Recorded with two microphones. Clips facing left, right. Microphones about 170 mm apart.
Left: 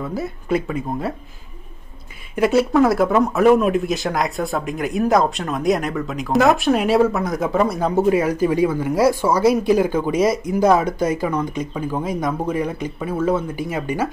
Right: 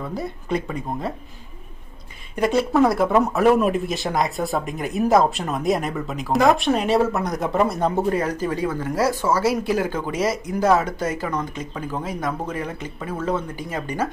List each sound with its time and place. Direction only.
0.0 s speech: 5° left (ahead or behind)
2.3 s speech: 5° left (ahead or behind)